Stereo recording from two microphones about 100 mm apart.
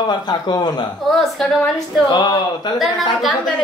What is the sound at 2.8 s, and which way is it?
Speech, centre (ahead or behind).